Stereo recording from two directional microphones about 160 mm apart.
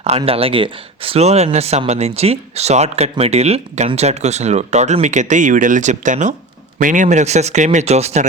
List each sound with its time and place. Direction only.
0.2 s speech: 35° right (ahead or behind)